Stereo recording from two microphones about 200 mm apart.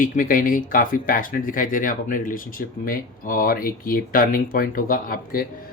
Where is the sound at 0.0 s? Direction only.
40° left (ahead or behind).